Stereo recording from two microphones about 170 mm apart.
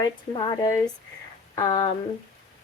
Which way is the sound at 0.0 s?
25° left (ahead or behind).